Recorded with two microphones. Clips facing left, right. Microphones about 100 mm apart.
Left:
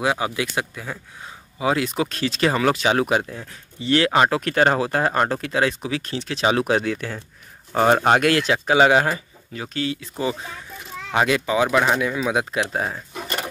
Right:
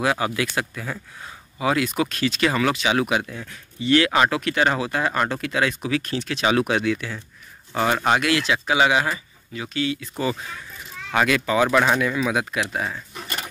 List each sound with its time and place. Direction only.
0.0 s speech: 20° left (ahead or behind); by 10.0 s 35° left (ahead or behind)
11.1 s speech: 20° left (ahead or behind)